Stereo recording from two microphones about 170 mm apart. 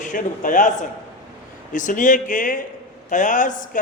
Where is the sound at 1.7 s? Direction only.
50° left (ahead or behind).